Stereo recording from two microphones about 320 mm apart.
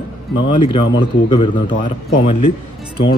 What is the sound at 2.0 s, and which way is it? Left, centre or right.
Speech, left.